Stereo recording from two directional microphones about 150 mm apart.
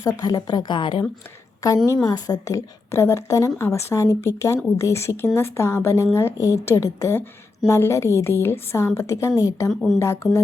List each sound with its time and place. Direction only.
0.0 s a woman's voice: 25° left (ahead or behind)